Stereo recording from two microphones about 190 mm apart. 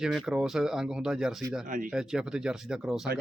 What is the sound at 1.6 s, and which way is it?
Speech, 45° right (ahead or behind).